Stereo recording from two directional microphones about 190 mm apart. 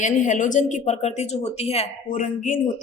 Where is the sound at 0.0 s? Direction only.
40° left (ahead or behind).